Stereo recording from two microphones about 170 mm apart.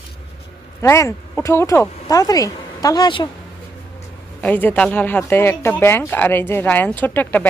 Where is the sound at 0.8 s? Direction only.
15° left (ahead or behind).